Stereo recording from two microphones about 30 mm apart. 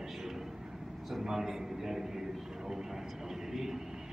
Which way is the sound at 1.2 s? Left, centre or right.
Centre.